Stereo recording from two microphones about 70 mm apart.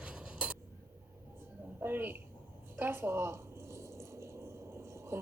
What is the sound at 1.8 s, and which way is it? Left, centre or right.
Speech, right.